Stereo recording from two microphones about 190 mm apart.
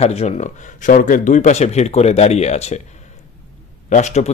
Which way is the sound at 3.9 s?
40° left (ahead or behind).